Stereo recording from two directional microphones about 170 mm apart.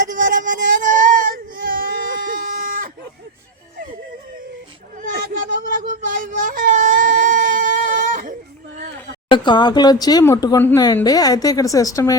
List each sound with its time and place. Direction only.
0.1 s baby cry: 50° right (ahead or behind)
4.9 s baby cry: 50° right (ahead or behind)
9.3 s speech: 25° left (ahead or behind)